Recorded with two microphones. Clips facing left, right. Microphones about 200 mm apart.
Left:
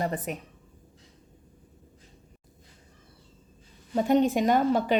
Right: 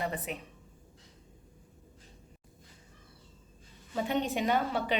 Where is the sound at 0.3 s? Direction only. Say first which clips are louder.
Left 5 dB; 45° left (ahead or behind).